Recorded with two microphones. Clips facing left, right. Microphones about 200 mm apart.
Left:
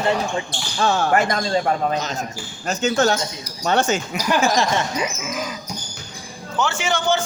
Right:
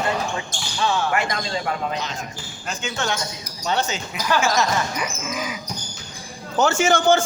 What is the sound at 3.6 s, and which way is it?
Speech, 50° left (ahead or behind).